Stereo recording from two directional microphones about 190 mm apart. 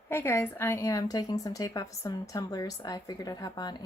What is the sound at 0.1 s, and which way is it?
A woman's voice, 15° left (ahead or behind).